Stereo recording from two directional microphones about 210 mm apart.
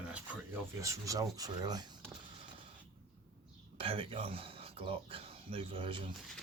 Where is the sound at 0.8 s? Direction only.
15° right (ahead or behind).